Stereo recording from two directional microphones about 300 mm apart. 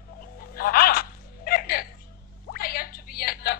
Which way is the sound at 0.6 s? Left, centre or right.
Left.